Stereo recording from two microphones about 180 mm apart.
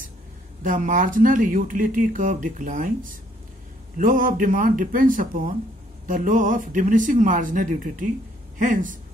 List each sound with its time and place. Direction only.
0.6 s speech: 50° right (ahead or behind)